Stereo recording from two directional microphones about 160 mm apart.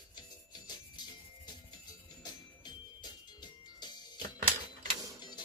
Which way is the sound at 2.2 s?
25° left (ahead or behind).